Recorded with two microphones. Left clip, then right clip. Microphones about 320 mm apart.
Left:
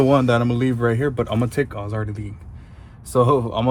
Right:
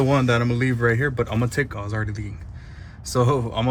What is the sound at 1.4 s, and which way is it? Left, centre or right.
Speech, centre.